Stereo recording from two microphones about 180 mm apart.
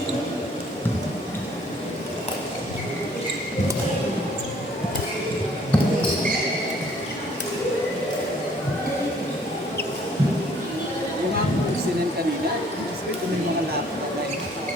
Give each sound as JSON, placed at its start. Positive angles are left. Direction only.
{"t": 5.7, "sound": "basketball bounce", "side_deg": 5}